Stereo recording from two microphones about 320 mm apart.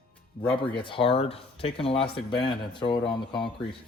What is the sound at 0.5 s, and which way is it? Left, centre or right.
Speech, centre.